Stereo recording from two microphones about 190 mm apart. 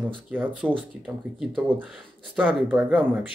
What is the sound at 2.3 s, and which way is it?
Speech, 5° right (ahead or behind).